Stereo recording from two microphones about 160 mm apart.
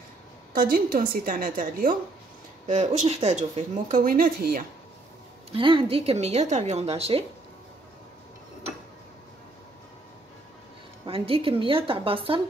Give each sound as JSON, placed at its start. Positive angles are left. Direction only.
{"t": 0.6, "sound": "a woman's voice", "side_deg": -65}
{"t": 5.5, "sound": "a woman's voice", "side_deg": -30}
{"t": 11.1, "sound": "a woman's voice", "side_deg": -35}